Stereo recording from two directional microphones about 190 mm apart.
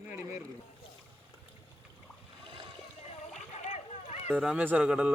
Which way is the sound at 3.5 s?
35° left (ahead or behind).